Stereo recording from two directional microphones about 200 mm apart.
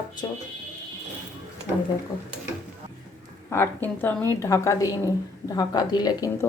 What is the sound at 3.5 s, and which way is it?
A woman's voice, 10° left (ahead or behind).